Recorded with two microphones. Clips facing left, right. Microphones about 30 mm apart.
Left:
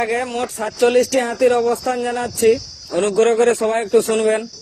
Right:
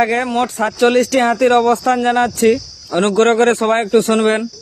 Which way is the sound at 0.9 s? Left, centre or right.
Right.